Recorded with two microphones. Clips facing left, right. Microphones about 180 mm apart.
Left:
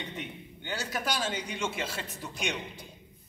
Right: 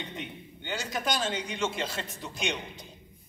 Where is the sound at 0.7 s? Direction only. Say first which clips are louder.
Right 2 dB; 10° left (ahead or behind).